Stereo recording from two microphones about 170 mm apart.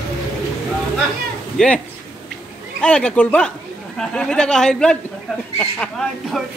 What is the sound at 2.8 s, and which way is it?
Speech, 5° left (ahead or behind).